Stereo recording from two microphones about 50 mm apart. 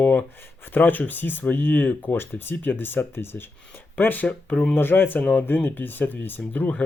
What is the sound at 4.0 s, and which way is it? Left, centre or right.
Speech, left.